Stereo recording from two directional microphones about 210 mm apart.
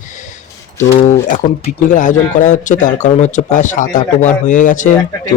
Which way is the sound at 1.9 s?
35° left (ahead or behind).